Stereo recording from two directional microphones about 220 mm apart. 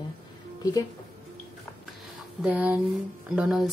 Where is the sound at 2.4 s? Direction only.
5° right (ahead or behind).